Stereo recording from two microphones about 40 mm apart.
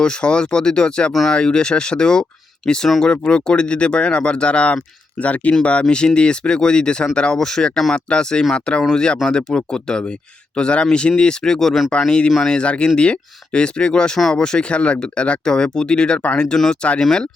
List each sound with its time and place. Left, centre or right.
0.0 s speech: left
6.1 s speech: left
7.9 s speech: left
12.6 s speech: left
17.0 s speech: centre